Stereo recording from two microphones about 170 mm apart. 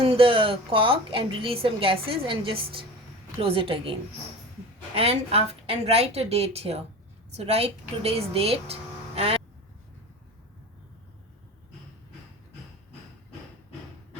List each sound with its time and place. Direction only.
0.0 s a woman's voice: 30° right (ahead or behind)
4.9 s a woman's voice: 35° right (ahead or behind)